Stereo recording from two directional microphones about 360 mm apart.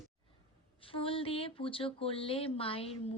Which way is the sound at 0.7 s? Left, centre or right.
Centre.